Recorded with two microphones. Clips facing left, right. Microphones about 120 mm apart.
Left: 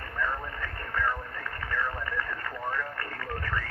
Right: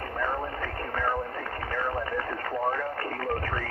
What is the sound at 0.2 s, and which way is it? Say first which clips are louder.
Speech: right 2 dB; 35° right (ahead or behind).